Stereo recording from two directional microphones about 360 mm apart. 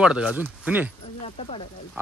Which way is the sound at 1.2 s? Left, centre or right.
Centre.